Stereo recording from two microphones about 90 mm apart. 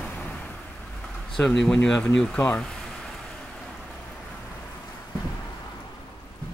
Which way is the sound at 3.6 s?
Centre (ahead or behind).